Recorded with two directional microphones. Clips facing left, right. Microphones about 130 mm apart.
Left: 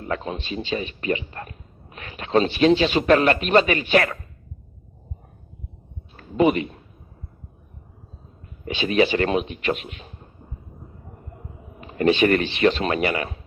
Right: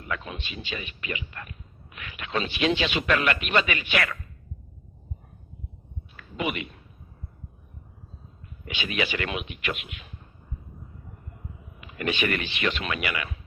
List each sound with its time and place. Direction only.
0.0 s a man's voice: 35° left (ahead or behind)
6.1 s speech: 35° left (ahead or behind)
8.6 s a man's voice: 35° left (ahead or behind)
11.8 s a man's voice: 35° left (ahead or behind)